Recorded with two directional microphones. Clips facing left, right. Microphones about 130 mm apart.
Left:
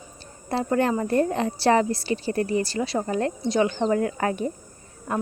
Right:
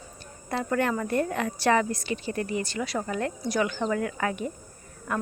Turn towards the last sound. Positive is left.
turn(degrees=30)  # may be behind; listen again after turning